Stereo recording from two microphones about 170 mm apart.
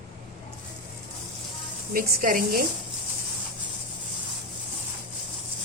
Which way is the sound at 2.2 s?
55° right (ahead or behind).